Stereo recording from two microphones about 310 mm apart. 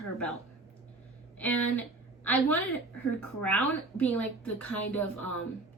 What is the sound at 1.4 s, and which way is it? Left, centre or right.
Speech, centre.